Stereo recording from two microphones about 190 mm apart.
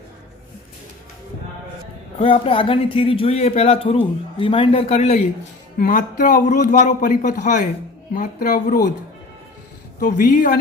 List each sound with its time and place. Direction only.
2.1 s speech: 30° left (ahead or behind)
5.8 s a man's voice: 45° left (ahead or behind)
10.0 s a man's voice: 45° left (ahead or behind)